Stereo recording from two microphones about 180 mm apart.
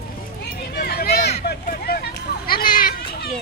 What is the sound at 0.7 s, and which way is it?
Vehicle, 55° left (ahead or behind).